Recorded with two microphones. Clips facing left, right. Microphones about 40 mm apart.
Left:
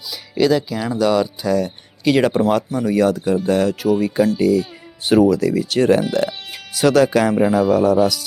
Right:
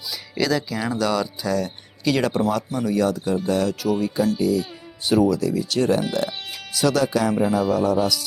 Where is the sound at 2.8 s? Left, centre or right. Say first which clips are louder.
Left 4 dB; left.